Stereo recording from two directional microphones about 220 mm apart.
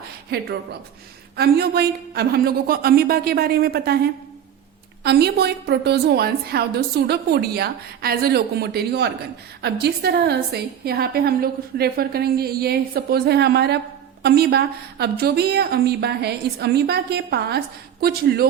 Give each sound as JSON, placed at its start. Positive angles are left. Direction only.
{"t": 0.3, "sound": "a woman's voice", "side_deg": -50}